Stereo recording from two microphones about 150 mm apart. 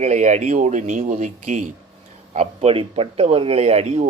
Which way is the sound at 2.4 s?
40° right (ahead or behind).